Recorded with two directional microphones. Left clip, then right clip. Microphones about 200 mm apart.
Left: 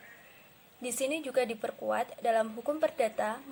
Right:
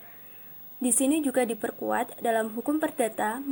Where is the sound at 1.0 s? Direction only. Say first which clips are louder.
Right 4 dB; 30° right (ahead or behind).